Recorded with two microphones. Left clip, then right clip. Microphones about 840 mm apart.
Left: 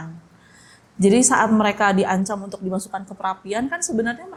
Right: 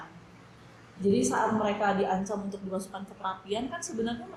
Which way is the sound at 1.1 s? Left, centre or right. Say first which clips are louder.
Left 10 dB; left.